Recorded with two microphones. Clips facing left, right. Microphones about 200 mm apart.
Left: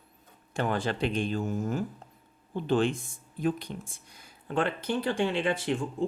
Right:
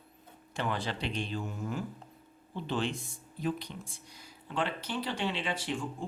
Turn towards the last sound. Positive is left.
turn(degrees=55)  # may be behind; listen again after turning